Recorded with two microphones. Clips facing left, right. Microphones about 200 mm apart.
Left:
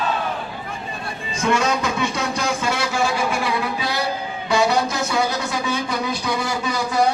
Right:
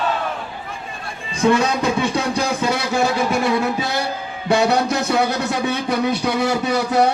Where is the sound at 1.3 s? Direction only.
35° right (ahead or behind).